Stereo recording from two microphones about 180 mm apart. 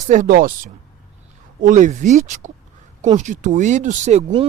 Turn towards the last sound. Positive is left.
turn(degrees=-40)  # may be behind; listen again after turning